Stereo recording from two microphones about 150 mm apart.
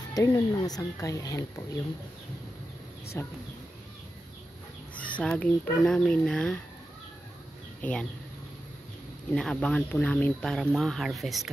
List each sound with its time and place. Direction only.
0.1 s speech: 25° left (ahead or behind)
3.1 s speech: 15° left (ahead or behind)
5.1 s speech: 5° left (ahead or behind)
7.8 s speech: 5° left (ahead or behind)
9.3 s speech: 5° left (ahead or behind)